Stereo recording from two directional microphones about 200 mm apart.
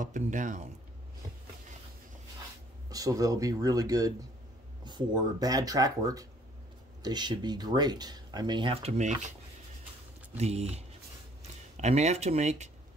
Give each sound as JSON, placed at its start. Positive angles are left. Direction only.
{"t": 0.0, "sound": "speech", "side_deg": -40}
{"t": 2.9, "sound": "speech", "side_deg": -15}
{"t": 10.3, "sound": "speech", "side_deg": -30}